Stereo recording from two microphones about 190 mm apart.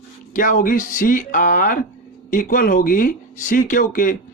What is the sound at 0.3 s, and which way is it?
Speech, 45° left (ahead or behind).